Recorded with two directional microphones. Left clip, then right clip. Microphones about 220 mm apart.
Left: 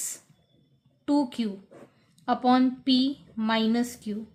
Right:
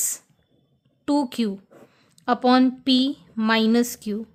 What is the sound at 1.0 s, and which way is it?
A woman's voice, 45° right (ahead or behind).